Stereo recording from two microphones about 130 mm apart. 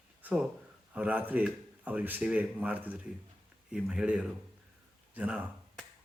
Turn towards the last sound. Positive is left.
turn(degrees=-10)  # may be behind; listen again after turning